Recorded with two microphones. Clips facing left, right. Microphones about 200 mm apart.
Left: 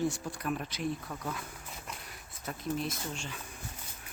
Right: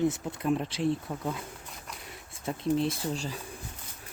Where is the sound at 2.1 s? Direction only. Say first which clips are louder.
Right 10 dB; 25° right (ahead or behind).